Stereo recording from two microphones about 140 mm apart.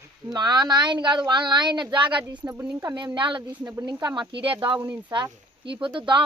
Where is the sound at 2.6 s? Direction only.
20° right (ahead or behind).